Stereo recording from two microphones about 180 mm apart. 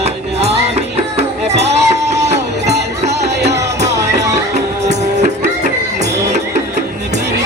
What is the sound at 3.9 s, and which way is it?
Music, 20° right (ahead or behind).